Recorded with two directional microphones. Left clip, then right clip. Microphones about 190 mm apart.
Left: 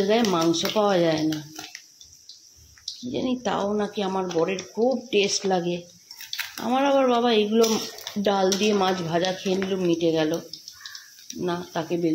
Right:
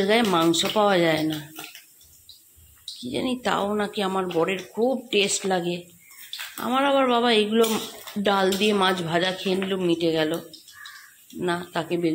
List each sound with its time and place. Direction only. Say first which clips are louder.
0.0 s speech: right 1 dB; centre (ahead or behind)
3.0 s speech: even; centre (ahead or behind)
5.1 s speech: even; 5° left (ahead or behind)